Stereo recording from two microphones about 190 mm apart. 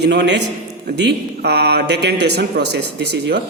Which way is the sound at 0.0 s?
60° right (ahead or behind).